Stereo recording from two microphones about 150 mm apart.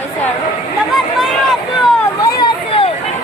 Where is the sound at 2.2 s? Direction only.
35° left (ahead or behind).